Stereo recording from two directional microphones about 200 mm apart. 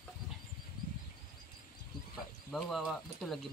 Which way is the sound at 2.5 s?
Centre (ahead or behind).